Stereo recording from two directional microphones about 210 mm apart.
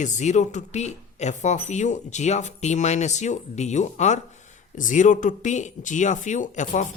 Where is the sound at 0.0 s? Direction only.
35° left (ahead or behind).